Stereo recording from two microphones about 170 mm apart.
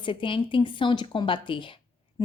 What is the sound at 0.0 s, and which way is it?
Speech, 30° left (ahead or behind).